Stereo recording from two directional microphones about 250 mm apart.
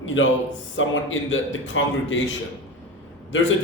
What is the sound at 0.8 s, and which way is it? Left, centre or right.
A man's voice, left.